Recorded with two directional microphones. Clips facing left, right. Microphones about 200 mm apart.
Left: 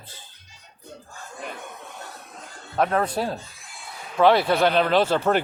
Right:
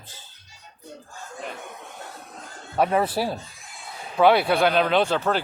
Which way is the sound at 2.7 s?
5° right (ahead or behind).